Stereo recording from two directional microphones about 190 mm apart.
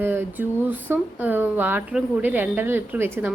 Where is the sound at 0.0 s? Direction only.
10° right (ahead or behind).